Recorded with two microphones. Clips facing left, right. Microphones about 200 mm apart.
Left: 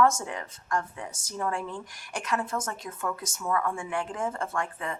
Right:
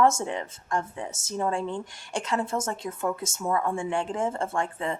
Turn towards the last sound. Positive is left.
turn(degrees=-25)  # may be behind; listen again after turning